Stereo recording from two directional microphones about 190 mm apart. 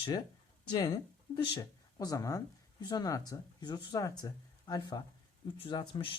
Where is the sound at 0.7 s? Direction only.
20° left (ahead or behind).